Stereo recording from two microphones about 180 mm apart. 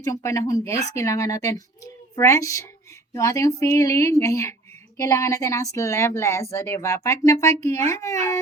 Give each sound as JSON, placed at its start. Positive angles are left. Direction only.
{"t": 0.0, "sound": "a woman's voice", "side_deg": 20}